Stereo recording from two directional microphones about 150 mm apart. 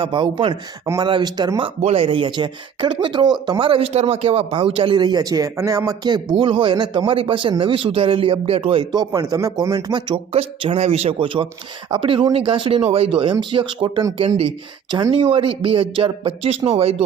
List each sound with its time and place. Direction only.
0.0 s a man's voice: 35° right (ahead or behind)
1.8 s a man's voice: 40° right (ahead or behind); by 10.2 s 25° right (ahead or behind)
10.3 s a man's voice: 40° right (ahead or behind)